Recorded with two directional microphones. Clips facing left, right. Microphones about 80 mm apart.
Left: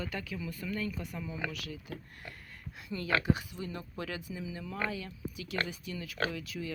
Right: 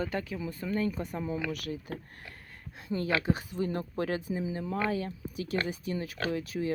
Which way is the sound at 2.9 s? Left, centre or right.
Right.